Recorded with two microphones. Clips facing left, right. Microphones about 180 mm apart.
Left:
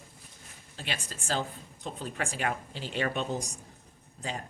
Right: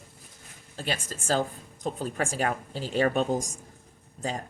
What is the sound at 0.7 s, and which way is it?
Speech, 45° right (ahead or behind).